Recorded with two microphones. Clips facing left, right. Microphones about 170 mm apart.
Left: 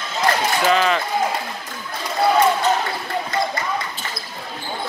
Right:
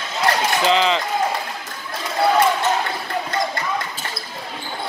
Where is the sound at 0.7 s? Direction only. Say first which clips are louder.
Even; 20° right (ahead or behind).